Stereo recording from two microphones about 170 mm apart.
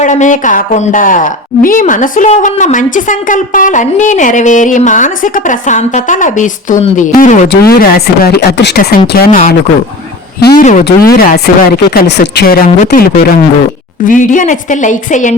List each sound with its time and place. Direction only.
0.0 s a woman's voice: 45° left (ahead or behind)
7.6 s speech: 60° left (ahead or behind)
10.6 s a woman's voice: 50° left (ahead or behind); by 12.2 s 75° left (ahead or behind)
12.4 s a woman's voice: 60° left (ahead or behind)